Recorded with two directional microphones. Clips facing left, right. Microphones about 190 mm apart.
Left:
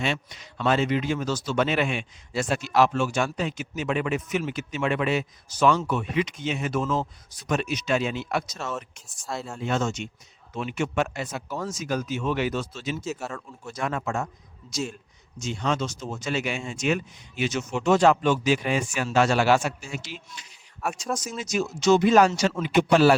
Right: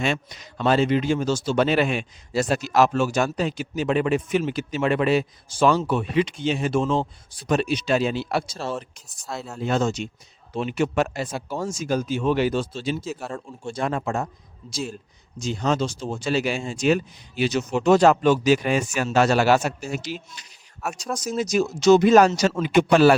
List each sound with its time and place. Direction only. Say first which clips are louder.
0.0 s a man's voice: right 3 dB; 45° right (ahead or behind)
9.2 s speech: even; centre (ahead or behind)
9.6 s a man's voice: right 5 dB; 35° right (ahead or behind)
13.1 s speech: even; centre (ahead or behind)
13.3 s a man's voice: right 5 dB; 30° right (ahead or behind)
15.4 s a man's voice: right 4 dB; 35° right (ahead or behind); by 23.1 s 55° right (ahead or behind)